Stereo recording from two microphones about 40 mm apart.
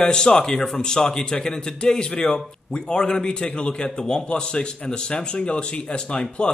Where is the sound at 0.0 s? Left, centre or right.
Centre.